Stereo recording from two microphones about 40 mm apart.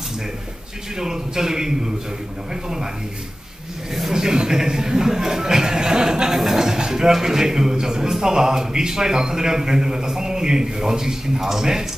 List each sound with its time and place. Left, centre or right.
0.9 s speech: centre
4.1 s music: centre
6.4 s speech: centre